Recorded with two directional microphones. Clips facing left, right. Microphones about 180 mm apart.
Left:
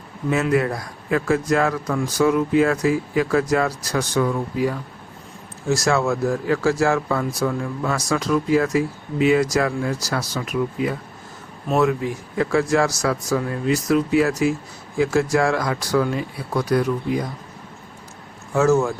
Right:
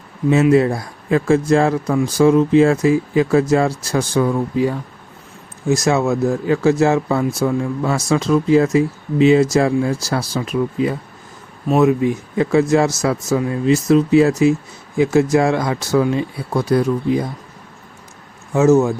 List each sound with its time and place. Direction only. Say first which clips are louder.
0.3 s speech: right 7 dB; 25° right (ahead or behind)
18.5 s speech: right 5 dB; 20° right (ahead or behind)